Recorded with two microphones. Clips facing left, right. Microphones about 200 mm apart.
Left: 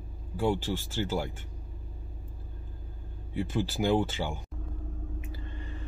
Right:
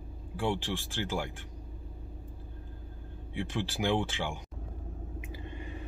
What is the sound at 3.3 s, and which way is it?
Speech, 10° left (ahead or behind).